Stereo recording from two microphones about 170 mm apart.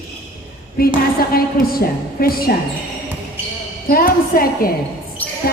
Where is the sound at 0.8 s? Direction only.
60° left (ahead or behind).